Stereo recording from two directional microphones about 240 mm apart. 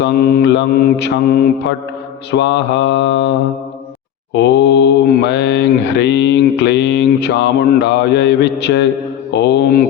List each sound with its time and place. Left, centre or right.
0.0 s mantra: left
4.4 s mantra: left